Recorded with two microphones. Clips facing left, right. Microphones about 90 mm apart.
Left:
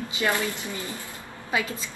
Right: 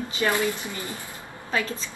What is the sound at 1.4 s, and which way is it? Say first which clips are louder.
Speech: even; 15° left (ahead or behind).